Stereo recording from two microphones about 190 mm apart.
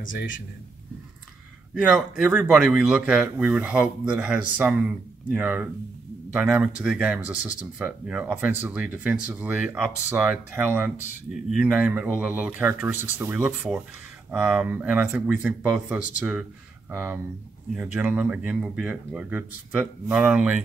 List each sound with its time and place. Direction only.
0.0 s speech: 45° left (ahead or behind)
1.8 s speech: 5° right (ahead or behind)